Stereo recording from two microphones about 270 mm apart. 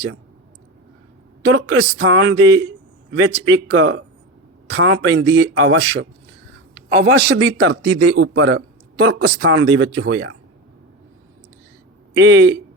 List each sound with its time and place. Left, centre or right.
1.5 s a man's voice: right
12.1 s a man's voice: right